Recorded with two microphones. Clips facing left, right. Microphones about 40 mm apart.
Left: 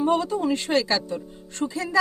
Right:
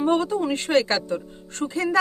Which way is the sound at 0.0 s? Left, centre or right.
Right.